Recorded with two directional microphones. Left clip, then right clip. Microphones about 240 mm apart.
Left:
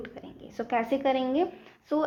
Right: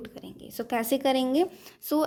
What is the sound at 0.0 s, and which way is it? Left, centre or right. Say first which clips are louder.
Speech: left 1 dB; right.